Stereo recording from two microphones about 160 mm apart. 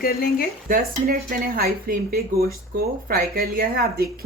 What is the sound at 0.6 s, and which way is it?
Speech, 60° right (ahead or behind).